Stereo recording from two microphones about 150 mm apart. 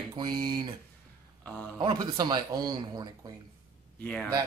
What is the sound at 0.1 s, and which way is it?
Speech, 30° right (ahead or behind).